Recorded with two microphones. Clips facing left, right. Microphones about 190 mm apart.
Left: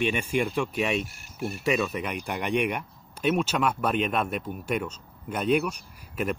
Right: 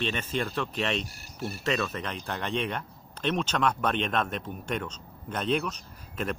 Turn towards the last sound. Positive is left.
turn(degrees=10)  # may be behind; listen again after turning